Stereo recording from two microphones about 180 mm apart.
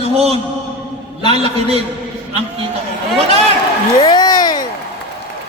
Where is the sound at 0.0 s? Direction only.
35° right (ahead or behind).